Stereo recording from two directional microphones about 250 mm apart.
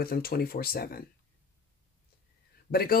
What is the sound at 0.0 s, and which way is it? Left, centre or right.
Speech, left.